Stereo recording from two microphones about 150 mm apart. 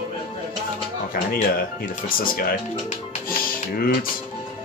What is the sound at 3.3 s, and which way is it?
Music, 75° left (ahead or behind).